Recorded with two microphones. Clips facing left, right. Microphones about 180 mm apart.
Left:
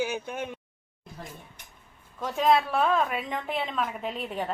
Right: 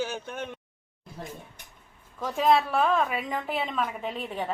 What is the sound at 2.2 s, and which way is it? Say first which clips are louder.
A woman's voice: even; centre (ahead or behind).